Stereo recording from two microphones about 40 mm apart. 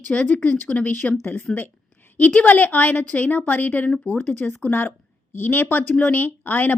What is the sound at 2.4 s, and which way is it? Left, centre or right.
A woman's voice, left.